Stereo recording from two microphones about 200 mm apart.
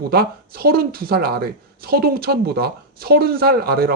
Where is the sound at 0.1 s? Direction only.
50° right (ahead or behind).